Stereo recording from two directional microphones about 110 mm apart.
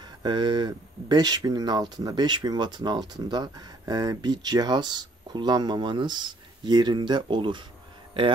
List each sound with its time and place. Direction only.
0.2 s speech: 45° right (ahead or behind)